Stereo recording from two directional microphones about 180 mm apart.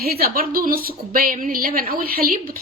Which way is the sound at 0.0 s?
55° right (ahead or behind).